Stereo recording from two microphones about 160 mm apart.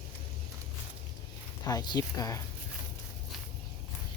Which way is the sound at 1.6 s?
25° left (ahead or behind).